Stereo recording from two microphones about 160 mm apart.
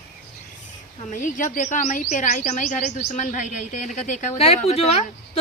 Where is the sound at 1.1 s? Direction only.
55° left (ahead or behind).